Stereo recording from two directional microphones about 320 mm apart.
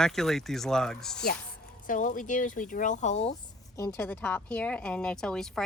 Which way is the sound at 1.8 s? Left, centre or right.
Left.